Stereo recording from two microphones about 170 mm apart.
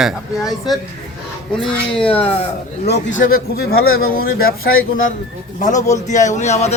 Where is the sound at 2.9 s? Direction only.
90° left.